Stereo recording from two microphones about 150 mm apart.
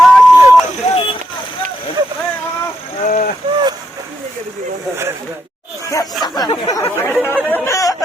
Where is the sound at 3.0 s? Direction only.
60° left (ahead or behind).